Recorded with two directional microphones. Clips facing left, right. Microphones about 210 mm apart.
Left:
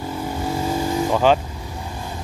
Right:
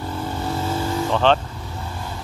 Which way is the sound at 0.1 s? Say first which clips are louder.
Left 1 dB; 10° left (ahead or behind).